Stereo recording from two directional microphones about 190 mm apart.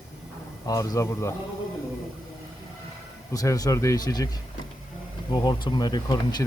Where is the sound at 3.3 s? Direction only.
15° left (ahead or behind).